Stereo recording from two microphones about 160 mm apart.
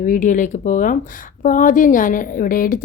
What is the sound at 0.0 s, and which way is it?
Speech, 55° left (ahead or behind).